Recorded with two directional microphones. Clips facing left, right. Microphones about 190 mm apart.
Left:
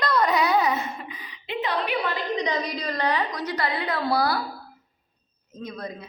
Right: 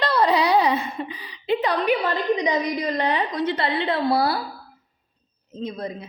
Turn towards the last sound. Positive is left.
turn(degrees=-25)  # may be behind; listen again after turning